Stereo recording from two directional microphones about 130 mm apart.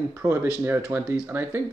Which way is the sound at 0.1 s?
15° right (ahead or behind).